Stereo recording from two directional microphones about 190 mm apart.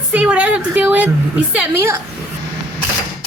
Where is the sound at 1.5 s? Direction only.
15° right (ahead or behind).